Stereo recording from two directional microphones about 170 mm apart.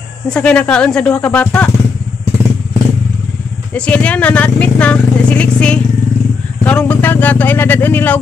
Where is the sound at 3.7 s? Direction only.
10° left (ahead or behind).